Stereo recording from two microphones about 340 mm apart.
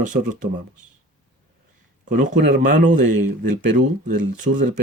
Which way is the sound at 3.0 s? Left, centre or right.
Right.